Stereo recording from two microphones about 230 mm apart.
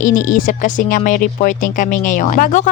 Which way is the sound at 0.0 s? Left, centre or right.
Left.